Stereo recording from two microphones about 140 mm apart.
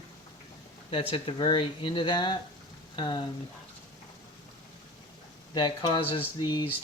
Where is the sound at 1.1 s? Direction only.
35° left (ahead or behind).